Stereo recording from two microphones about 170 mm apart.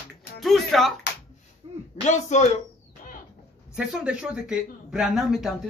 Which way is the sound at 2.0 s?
45° left (ahead or behind).